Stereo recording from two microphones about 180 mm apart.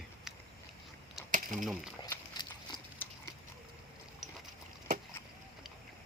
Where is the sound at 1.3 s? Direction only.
45° right (ahead or behind).